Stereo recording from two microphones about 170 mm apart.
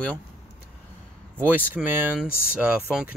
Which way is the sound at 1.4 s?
10° right (ahead or behind).